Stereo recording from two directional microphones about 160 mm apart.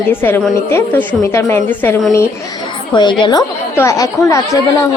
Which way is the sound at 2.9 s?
30° left (ahead or behind).